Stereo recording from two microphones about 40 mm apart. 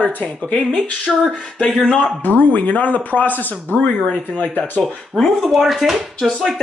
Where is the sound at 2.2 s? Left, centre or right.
Left.